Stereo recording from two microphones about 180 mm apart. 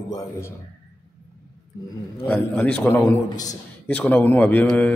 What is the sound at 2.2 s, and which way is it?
A man's voice, 5° left (ahead or behind).